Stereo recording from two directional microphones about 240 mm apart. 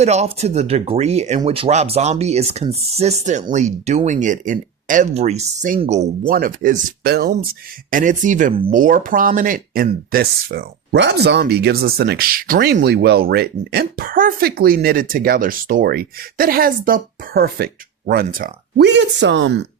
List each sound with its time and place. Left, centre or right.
0.0 s speech: right